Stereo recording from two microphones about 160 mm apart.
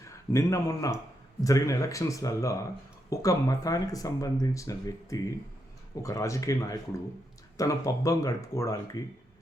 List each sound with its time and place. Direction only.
0.0 s speech: 20° left (ahead or behind)